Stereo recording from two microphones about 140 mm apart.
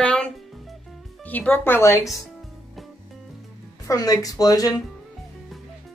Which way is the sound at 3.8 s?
25° left (ahead or behind).